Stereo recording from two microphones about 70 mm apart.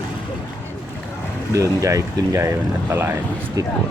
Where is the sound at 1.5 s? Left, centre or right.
Right.